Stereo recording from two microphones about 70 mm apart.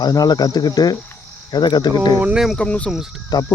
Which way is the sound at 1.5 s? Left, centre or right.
Left.